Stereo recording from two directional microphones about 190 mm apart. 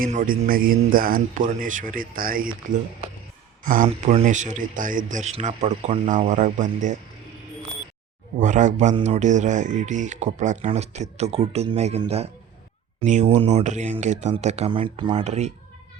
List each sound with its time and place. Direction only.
0.0 s a man's voice: 45° right (ahead or behind)
3.6 s speech: 45° right (ahead or behind)
8.4 s speech: 40° right (ahead or behind)
15.1 s speech: 35° right (ahead or behind)